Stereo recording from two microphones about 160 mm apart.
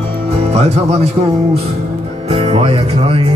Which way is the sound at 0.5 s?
40° right (ahead or behind).